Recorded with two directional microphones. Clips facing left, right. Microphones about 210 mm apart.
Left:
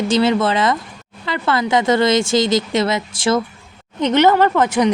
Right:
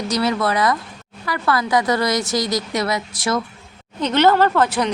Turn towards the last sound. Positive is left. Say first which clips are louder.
# left 3 dB
turn(degrees=15)  # may be behind; listen again after turning